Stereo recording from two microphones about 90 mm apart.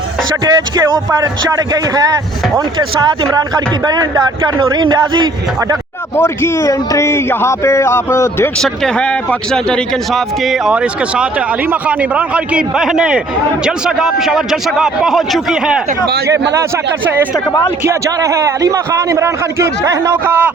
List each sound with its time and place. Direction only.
0.4 s a man's voice: 45° right (ahead or behind)
6.1 s speech: 30° left (ahead or behind)
8.6 s a man's voice: 5° left (ahead or behind)
10.7 s a man's voice: 10° right (ahead or behind)
16.2 s a man's voice: 30° right (ahead or behind)
17.8 s a man's voice: 35° right (ahead or behind)
20.2 s a man's voice: 20° right (ahead or behind)